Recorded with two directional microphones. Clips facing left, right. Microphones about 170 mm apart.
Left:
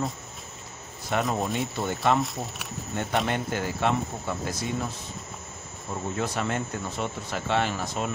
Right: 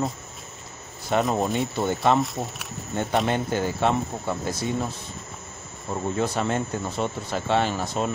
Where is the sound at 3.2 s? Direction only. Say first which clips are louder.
Right 4 dB; 25° right (ahead or behind).